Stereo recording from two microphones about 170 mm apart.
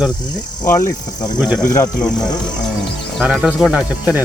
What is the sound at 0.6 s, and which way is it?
Cricket, 10° left (ahead or behind).